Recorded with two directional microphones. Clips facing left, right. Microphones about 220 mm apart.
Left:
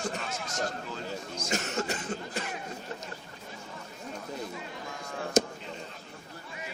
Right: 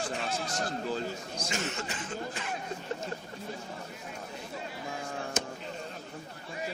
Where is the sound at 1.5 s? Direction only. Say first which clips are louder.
Left 5 dB; 40° left (ahead or behind).